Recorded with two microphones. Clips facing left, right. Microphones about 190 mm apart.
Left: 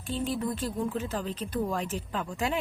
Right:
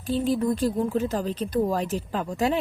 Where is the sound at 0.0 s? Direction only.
40° right (ahead or behind).